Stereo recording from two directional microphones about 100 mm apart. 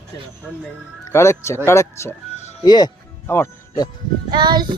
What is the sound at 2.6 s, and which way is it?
Speech, 45° left (ahead or behind).